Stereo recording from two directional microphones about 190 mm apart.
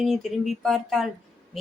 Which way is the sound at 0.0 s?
Centre (ahead or behind).